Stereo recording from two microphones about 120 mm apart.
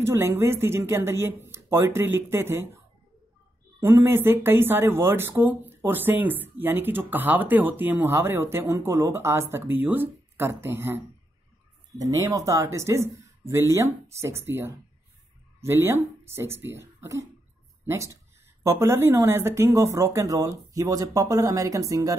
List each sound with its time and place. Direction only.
0.0 s speech: 20° right (ahead or behind)
3.8 s speech: 20° right (ahead or behind)
12.0 s speech: 30° right (ahead or behind)